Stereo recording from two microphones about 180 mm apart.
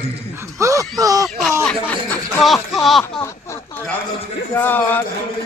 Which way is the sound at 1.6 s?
5° left (ahead or behind).